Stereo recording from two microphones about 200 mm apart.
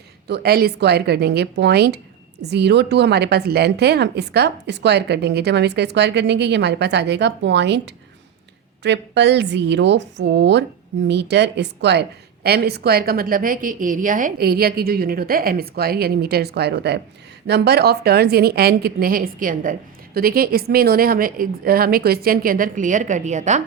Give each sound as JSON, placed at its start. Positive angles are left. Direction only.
{"t": 0.3, "sound": "a woman's voice", "side_deg": -55}